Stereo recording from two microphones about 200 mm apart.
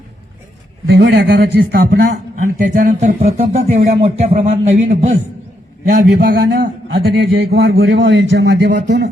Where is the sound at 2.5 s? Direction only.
40° right (ahead or behind).